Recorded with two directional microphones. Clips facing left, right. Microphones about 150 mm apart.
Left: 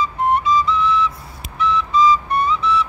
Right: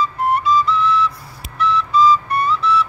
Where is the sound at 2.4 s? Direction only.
Centre (ahead or behind).